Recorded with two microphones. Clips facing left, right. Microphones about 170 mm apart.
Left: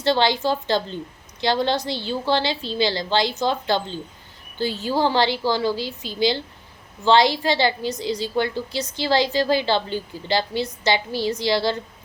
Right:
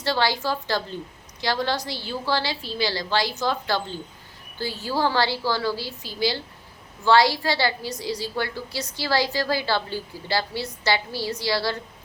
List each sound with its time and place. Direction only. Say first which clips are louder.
0.0 s a woman's voice: left 4 dB; 25° left (ahead or behind)